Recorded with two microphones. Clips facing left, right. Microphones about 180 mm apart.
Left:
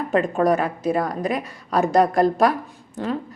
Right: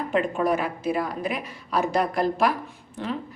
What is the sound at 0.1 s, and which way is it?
A woman's voice, 40° left (ahead or behind).